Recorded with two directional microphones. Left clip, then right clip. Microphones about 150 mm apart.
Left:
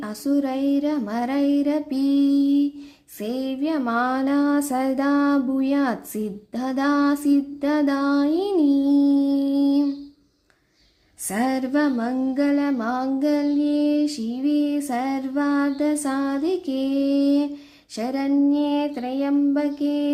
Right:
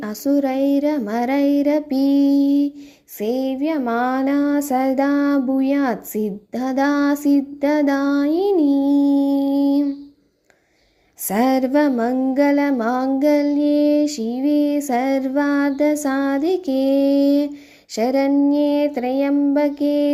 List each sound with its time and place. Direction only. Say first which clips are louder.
0.0 s child singing: right 4 dB; 25° right (ahead or behind)
11.3 s child singing: right 6 dB; 35° right (ahead or behind)